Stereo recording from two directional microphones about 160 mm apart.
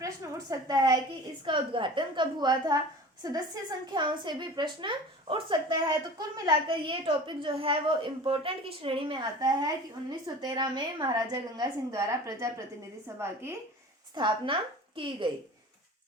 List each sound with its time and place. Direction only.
0.0 s a sound: 20° right (ahead or behind)
1.5 s a woman's voice: 30° right (ahead or behind)
14.2 s a woman's voice: 30° right (ahead or behind)